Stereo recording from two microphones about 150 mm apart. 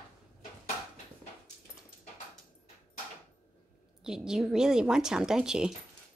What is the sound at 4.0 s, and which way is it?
A woman's voice, 5° right (ahead or behind).